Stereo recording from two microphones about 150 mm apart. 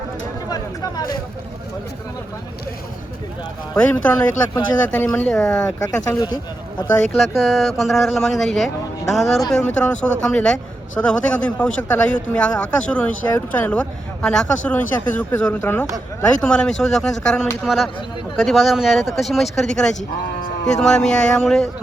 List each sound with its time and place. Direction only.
0.5 s speech: 25° left (ahead or behind)
3.8 s speech: 10° left (ahead or behind)
4.1 s speech: 25° left (ahead or behind)
4.9 s speech: 10° left (ahead or behind)
5.6 s speech: 20° left (ahead or behind)
6.9 s speech: 5° left (ahead or behind)
20.0 s speech: 50° left (ahead or behind)
20.7 s speech: 5° left (ahead or behind)